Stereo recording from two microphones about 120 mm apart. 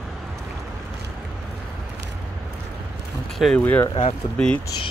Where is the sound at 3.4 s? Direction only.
Centre (ahead or behind).